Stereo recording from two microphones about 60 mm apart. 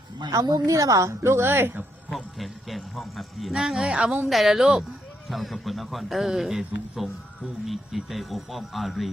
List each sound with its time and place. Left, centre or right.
0.3 s a woman's voice: right
2.1 s a man's voice: centre
4.3 s a man's voice: centre